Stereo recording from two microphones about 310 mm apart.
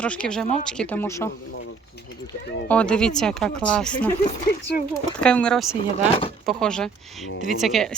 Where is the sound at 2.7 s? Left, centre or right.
Centre.